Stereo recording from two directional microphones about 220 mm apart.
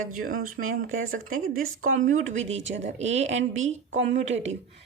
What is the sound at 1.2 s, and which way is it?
Speech, 65° right (ahead or behind).